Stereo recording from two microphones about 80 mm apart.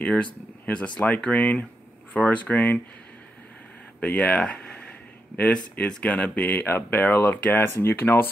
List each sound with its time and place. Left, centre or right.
0.0 s speech: centre
4.0 s speech: centre